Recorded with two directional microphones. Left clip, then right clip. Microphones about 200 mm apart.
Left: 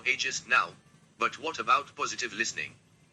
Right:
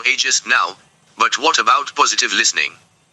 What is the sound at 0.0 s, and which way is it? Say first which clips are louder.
Speech: right 13 dB; 50° right (ahead or behind).